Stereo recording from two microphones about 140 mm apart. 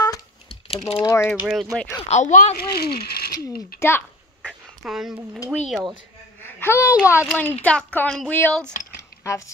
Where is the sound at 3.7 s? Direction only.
90° left.